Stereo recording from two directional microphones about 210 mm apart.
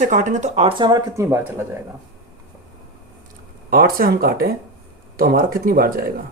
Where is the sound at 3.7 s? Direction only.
45° right (ahead or behind).